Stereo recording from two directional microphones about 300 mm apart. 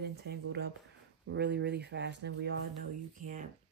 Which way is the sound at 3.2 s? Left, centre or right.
Right.